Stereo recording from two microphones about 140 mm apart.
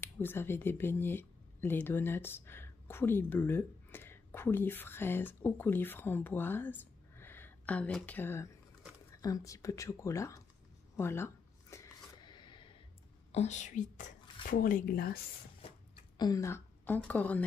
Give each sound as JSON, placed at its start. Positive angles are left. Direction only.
{"t": 0.2, "sound": "speech", "side_deg": 15}
{"t": 11.0, "sound": "shuffling cards", "side_deg": 20}
{"t": 13.3, "sound": "speech", "side_deg": 55}
{"t": 14.5, "sound": "speech", "side_deg": 80}
{"t": 16.2, "sound": "a woman's voice", "side_deg": 25}